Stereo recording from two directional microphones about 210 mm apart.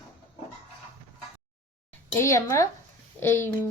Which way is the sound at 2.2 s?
15° left (ahead or behind).